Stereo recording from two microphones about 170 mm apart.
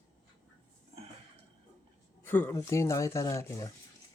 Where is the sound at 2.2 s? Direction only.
10° left (ahead or behind).